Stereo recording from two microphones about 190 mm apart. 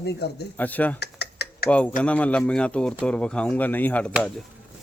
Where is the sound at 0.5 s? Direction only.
10° left (ahead or behind).